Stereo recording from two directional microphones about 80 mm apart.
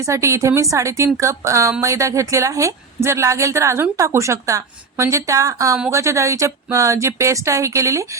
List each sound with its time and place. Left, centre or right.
0.0 s a woman's voice: right